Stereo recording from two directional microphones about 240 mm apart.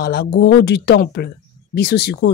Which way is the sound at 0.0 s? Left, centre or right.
Left.